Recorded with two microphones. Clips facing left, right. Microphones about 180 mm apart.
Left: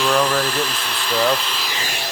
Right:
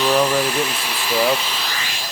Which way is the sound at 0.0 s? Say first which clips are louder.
Right 1 dB; 5° right (ahead or behind).